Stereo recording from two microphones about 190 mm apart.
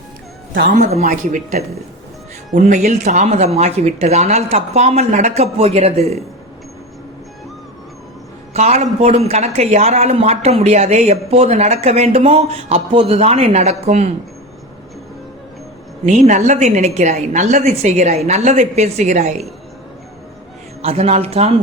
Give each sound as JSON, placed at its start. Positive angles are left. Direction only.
{"t": 0.8, "sound": "speech", "side_deg": -40}
{"t": 8.5, "sound": "speech", "side_deg": -35}
{"t": 16.0, "sound": "speech", "side_deg": -40}
{"t": 20.8, "sound": "speech", "side_deg": -35}